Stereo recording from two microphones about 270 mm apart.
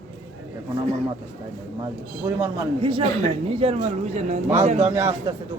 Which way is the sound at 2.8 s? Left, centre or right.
Centre.